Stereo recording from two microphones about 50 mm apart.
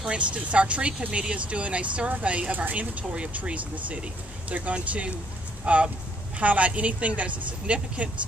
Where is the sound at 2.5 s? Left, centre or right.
Right.